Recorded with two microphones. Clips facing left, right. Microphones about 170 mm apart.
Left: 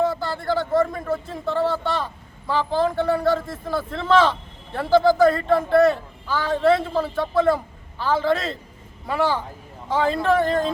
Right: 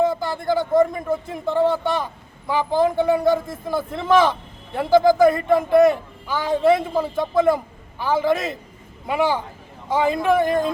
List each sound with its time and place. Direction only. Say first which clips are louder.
0.0 s a man's voice: right 2 dB; 15° right (ahead or behind)